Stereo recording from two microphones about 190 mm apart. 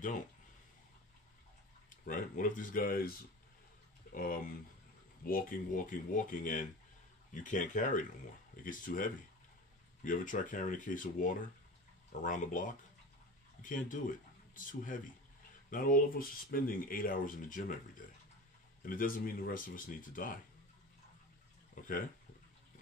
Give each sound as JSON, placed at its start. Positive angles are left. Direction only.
{"t": 2.0, "sound": "speech", "side_deg": 45}
{"t": 21.7, "sound": "speech", "side_deg": 45}